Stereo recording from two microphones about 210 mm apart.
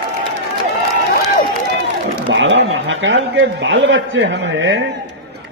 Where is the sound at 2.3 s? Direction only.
60° right (ahead or behind).